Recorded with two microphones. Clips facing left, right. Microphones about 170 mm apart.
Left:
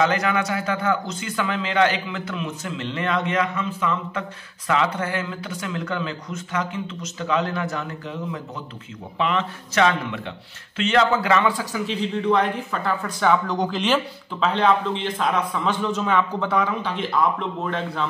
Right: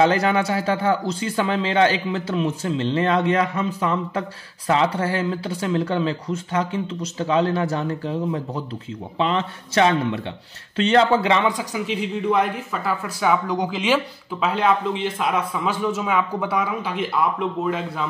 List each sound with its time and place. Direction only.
0.0 s a man's voice: 30° right (ahead or behind); by 18.0 s 5° right (ahead or behind)